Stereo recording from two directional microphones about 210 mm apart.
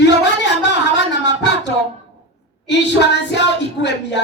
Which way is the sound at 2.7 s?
55° left (ahead or behind).